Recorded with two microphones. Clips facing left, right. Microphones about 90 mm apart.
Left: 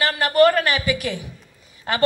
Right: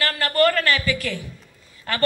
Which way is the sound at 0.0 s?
20° left (ahead or behind).